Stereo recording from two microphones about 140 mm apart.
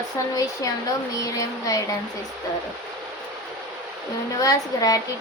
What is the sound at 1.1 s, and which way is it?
Speech, 25° left (ahead or behind).